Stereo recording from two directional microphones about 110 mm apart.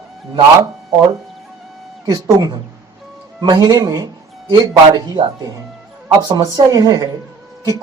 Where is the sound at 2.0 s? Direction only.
40° right (ahead or behind).